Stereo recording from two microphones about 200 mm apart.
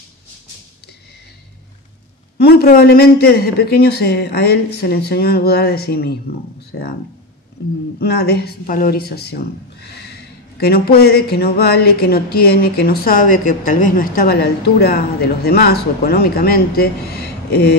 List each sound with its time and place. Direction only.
2.3 s a woman's voice: 50° left (ahead or behind)
8.0 s a woman's voice: 55° left (ahead or behind)